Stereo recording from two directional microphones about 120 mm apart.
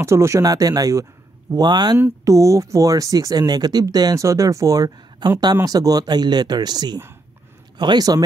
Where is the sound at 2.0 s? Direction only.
20° right (ahead or behind).